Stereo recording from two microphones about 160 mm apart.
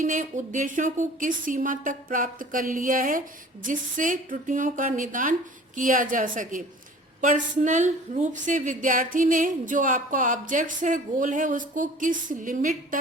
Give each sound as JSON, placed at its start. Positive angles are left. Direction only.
{"t": 0.0, "sound": "a woman's voice", "side_deg": -50}